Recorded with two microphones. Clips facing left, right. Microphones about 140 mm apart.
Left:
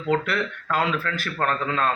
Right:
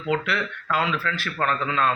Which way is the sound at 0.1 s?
45° left (ahead or behind).